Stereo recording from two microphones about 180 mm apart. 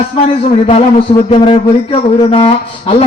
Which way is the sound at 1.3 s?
30° left (ahead or behind).